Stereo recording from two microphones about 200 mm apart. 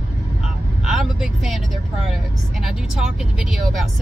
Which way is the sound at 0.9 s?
Centre (ahead or behind).